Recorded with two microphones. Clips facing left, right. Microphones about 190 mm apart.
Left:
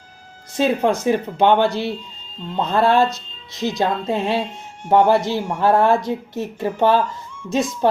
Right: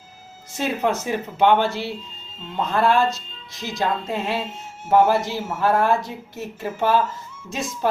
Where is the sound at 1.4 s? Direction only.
15° left (ahead or behind).